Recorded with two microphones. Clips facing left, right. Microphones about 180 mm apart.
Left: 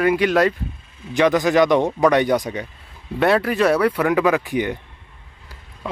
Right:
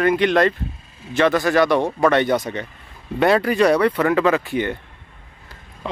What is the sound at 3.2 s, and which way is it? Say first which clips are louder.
Speech: right 1 dB; centre (ahead or behind).